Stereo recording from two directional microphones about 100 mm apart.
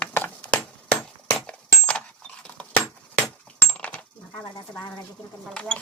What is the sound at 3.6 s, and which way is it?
Coin, 15° left (ahead or behind).